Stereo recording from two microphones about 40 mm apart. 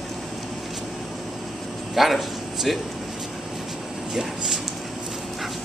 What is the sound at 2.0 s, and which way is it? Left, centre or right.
Speech, centre.